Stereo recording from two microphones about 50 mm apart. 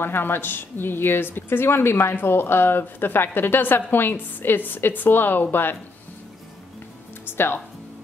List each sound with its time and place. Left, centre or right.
0.0 s speech: left
7.2 s speech: left